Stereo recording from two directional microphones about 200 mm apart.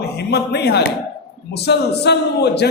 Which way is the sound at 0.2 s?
55° left (ahead or behind).